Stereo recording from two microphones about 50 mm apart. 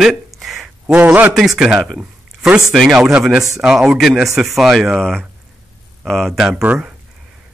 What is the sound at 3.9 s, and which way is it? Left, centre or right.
A man's voice, centre.